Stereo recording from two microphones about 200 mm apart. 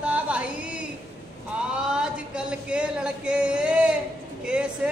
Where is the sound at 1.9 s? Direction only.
5° right (ahead or behind).